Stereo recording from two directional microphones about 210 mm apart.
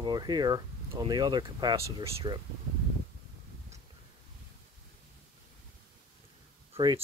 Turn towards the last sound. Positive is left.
turn(degrees=-20)  # may be behind; listen again after turning